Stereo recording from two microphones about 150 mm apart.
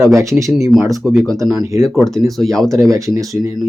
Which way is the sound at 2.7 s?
20° right (ahead or behind).